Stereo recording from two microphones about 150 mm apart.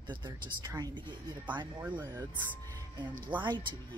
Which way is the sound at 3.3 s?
30° right (ahead or behind).